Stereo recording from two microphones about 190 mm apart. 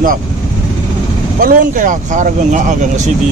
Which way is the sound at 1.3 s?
45° right (ahead or behind).